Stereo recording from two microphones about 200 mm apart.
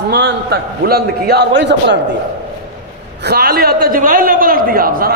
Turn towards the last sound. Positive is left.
turn(degrees=-45)  # may be behind; listen again after turning